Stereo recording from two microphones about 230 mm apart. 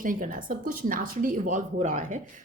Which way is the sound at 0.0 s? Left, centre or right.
Right.